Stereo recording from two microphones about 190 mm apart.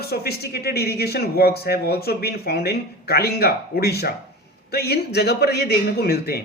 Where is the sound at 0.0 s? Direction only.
55° left (ahead or behind).